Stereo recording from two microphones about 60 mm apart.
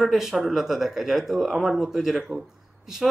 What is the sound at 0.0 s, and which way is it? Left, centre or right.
Speech, centre.